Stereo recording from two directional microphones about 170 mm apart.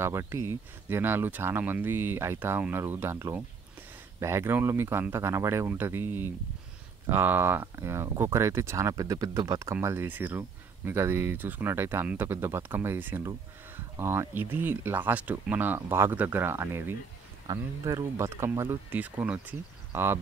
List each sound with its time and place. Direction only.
0.0 s speech: 15° right (ahead or behind)